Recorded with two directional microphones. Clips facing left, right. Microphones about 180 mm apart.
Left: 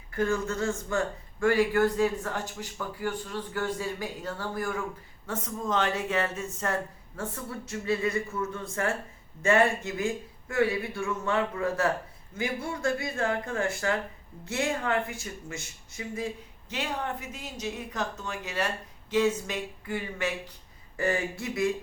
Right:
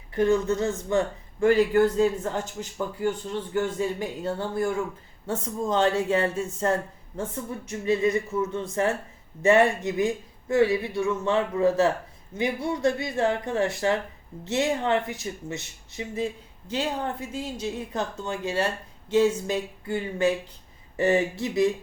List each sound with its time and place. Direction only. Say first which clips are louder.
0.1 s speech: right 6 dB; 20° right (ahead or behind)
7.2 s speech: right 4 dB; 15° right (ahead or behind)